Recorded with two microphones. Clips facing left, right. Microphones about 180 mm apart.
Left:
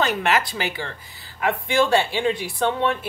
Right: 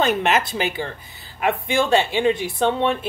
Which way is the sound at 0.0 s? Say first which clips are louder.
Right 2 dB; 20° right (ahead or behind).